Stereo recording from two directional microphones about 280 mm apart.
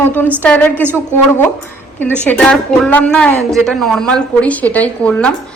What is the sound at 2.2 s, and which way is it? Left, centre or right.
A woman's voice, centre.